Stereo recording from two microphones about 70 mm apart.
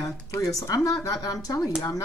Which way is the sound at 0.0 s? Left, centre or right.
Left.